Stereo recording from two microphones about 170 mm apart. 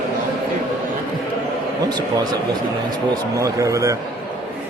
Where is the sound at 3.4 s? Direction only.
20° right (ahead or behind).